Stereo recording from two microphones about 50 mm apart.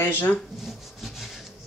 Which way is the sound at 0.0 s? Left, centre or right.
Left.